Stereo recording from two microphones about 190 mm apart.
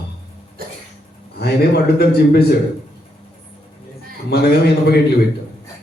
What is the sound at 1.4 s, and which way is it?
A man's voice, 55° left (ahead or behind).